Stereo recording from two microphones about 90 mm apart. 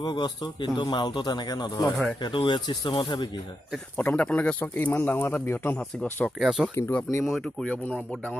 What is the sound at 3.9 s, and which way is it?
Speech, 15° left (ahead or behind).